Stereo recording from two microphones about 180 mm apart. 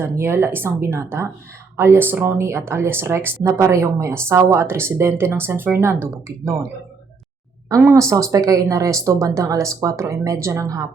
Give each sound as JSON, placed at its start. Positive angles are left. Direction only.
{"t": 0.0, "sound": "speech", "side_deg": -15}
{"t": 7.7, "sound": "speech", "side_deg": -15}